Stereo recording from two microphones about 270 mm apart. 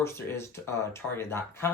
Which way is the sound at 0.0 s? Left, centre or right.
Centre.